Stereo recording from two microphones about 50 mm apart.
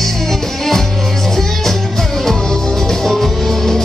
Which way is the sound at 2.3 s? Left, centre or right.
Centre.